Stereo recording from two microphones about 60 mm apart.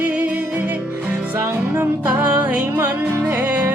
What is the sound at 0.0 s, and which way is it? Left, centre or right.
Music, right.